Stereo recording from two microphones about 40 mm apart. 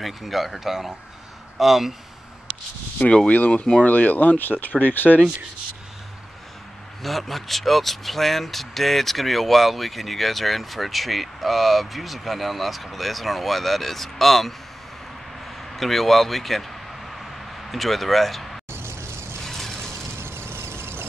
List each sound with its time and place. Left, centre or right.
0.0 s speech: centre
3.3 s speech: left
7.0 s speech: centre
15.4 s a sound: centre
20.2 s vehicle: right